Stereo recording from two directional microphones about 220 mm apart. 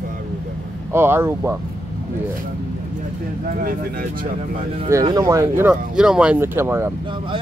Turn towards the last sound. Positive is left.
turn(degrees=-10)  # may be behind; listen again after turning